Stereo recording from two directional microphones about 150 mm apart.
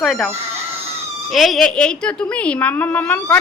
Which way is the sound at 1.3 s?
Centre (ahead or behind).